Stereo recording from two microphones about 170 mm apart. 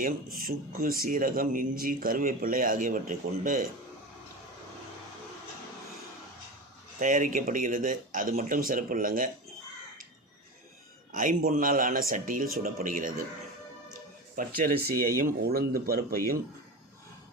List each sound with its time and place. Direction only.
0.0 s speech: 55° right (ahead or behind)
7.0 s a man's voice: 50° right (ahead or behind)
11.1 s a man's voice: 50° right (ahead or behind)
14.3 s speech: 55° right (ahead or behind)